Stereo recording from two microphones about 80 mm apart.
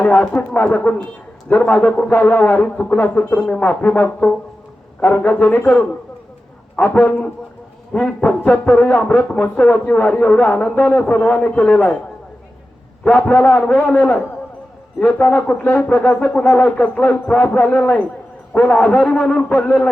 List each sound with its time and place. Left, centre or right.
0.0 s speech: centre
13.1 s speech: centre